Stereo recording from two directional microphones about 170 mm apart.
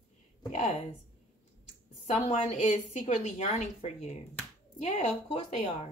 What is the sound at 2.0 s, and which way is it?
A woman's voice, 40° left (ahead or behind).